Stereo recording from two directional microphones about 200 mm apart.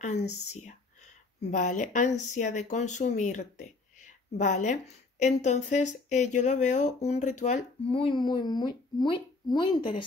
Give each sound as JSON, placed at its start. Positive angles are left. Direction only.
{"t": 0.0, "sound": "a woman's voice", "side_deg": 35}
{"t": 1.4, "sound": "a woman's voice", "side_deg": 35}